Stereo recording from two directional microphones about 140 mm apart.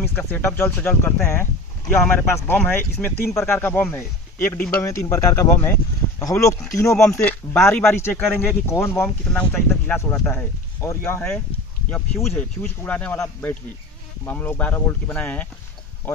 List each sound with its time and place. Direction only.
0.3 s speech: 15° left (ahead or behind)